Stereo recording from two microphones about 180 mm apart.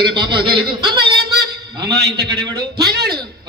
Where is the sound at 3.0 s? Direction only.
25° right (ahead or behind).